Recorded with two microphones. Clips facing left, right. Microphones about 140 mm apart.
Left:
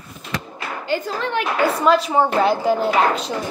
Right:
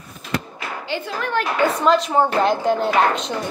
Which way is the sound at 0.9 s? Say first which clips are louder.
Left 5 dB; 40° left (ahead or behind).